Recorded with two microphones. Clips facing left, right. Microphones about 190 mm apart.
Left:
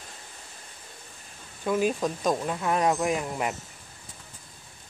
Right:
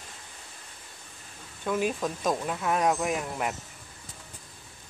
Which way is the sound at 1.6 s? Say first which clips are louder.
Left 3 dB; centre (ahead or behind).